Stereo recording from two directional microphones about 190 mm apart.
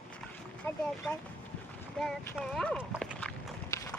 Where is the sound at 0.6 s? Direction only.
10° left (ahead or behind).